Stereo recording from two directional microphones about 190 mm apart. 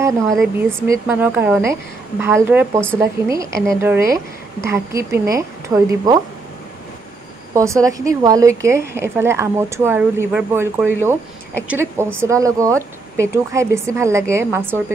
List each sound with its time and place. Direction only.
0.8 s a woman's voice: 10° right (ahead or behind)
7.5 s a woman's voice: 15° right (ahead or behind)